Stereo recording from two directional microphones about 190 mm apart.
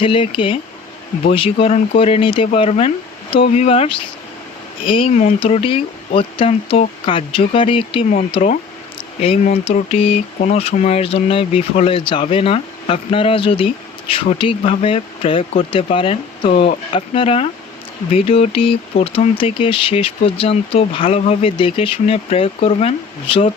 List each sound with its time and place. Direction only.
0.0 s speech: 25° left (ahead or behind)